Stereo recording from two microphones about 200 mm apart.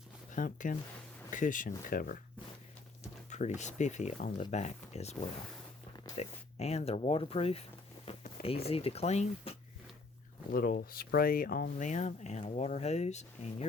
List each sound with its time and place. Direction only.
0.3 s speech: 40° left (ahead or behind)
3.2 s a sound: 35° left (ahead or behind)
3.6 s speech: 35° left (ahead or behind)
6.1 s speech: 30° left (ahead or behind)
8.0 s a sound: 30° left (ahead or behind)
8.6 s speech: 30° left (ahead or behind)
10.5 s speech: 50° left (ahead or behind)